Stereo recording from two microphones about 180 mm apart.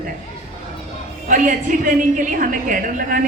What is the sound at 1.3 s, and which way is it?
A woman's voice, 45° right (ahead or behind).